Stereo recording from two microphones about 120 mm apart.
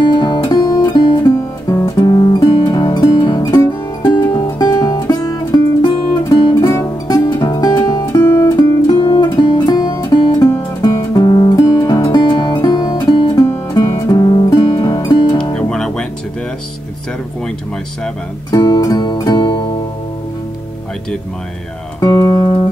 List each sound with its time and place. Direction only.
0.0 s music: 40° left (ahead or behind); by 4.5 s 20° left (ahead or behind)
4.6 s music: 35° left (ahead or behind)
8.3 s music: 15° left (ahead or behind)
9.3 s music: 35° left (ahead or behind)
13.7 s music: 30° left (ahead or behind)
15.5 s music: 5° left (ahead or behind)
18.5 s music: 35° left (ahead or behind)
22.0 s music: 30° left (ahead or behind)